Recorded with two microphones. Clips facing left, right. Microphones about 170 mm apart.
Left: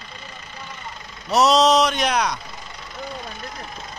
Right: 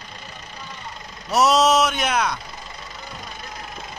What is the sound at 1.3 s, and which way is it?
Speech, 5° right (ahead or behind).